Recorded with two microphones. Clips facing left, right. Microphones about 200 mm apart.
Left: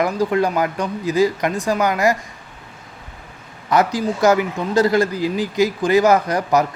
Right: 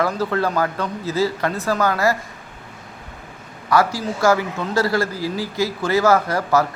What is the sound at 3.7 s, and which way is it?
Speech, 20° left (ahead or behind).